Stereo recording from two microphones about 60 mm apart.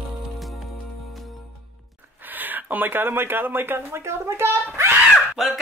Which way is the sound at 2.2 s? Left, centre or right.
Right.